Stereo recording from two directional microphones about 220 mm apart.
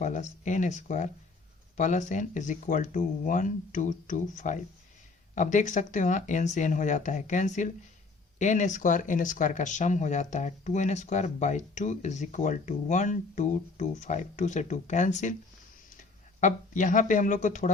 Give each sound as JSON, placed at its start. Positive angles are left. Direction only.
{"t": 0.0, "sound": "speech", "side_deg": 35}